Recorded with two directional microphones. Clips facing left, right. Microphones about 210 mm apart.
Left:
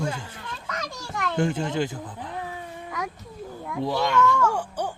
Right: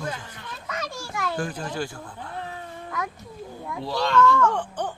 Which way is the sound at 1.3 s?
25° left (ahead or behind).